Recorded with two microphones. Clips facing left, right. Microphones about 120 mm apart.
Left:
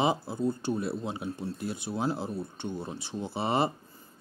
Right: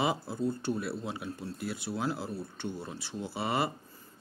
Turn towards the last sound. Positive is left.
turn(degrees=25)  # may be behind; listen again after turning